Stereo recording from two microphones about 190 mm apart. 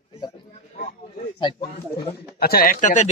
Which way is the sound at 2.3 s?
50° left (ahead or behind).